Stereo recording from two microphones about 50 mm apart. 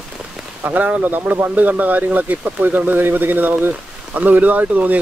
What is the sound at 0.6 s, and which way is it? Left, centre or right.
Speech, right.